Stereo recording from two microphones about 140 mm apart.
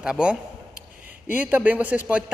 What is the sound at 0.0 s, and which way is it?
A man's voice, 5° right (ahead or behind).